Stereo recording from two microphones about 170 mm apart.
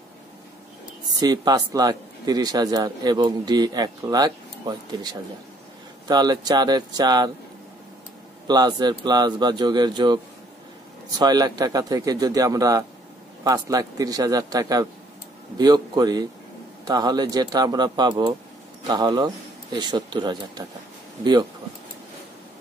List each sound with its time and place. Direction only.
1.2 s a man's voice: 25° right (ahead or behind)
8.5 s a man's voice: 25° right (ahead or behind)